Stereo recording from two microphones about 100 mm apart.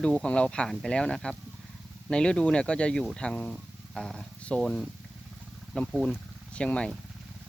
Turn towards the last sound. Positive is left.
turn(degrees=10)  # may be behind; listen again after turning